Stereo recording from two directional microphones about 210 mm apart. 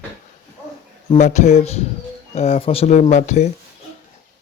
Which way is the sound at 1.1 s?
35° left (ahead or behind).